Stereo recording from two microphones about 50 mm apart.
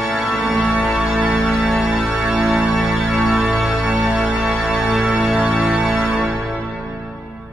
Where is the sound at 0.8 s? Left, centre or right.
Centre.